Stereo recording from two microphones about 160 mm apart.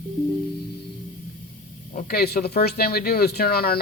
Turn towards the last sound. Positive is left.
turn(degrees=75)  # may be behind; listen again after turning